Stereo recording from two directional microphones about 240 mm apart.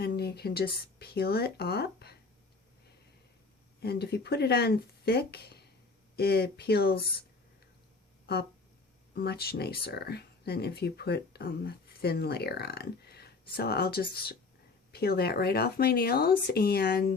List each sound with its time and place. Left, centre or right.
0.0 s speech: left
3.8 s speech: left
9.1 s speech: left